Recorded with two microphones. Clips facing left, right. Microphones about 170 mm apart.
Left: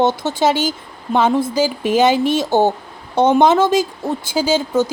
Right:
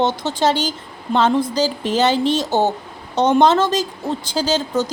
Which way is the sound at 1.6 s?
10° left (ahead or behind).